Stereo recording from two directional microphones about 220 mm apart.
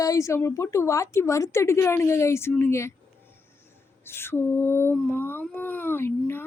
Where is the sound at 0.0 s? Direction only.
15° left (ahead or behind).